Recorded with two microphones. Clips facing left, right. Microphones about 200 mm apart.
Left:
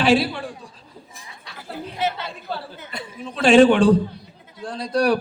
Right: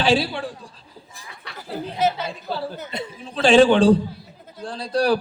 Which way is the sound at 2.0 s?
40° right (ahead or behind).